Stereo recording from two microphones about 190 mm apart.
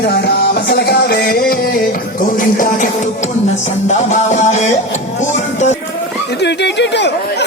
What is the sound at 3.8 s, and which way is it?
Music, 40° left (ahead or behind).